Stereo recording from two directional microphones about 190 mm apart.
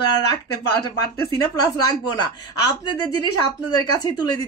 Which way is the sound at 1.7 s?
20° left (ahead or behind).